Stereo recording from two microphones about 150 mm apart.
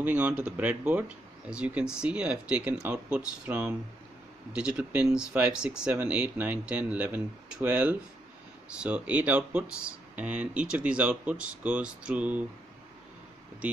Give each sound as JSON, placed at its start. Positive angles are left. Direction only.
{"t": 0.0, "sound": "speech", "side_deg": -10}